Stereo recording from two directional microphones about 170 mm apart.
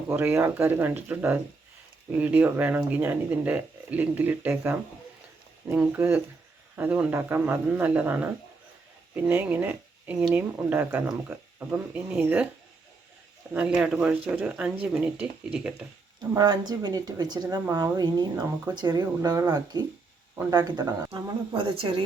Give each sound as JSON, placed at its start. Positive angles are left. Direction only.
{"t": 0.1, "sound": "speech", "side_deg": -15}
{"t": 13.5, "sound": "speech", "side_deg": -5}
{"t": 16.3, "sound": "speech", "side_deg": -20}